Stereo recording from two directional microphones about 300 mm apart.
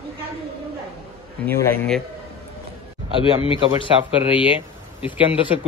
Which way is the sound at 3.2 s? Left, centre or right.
Centre.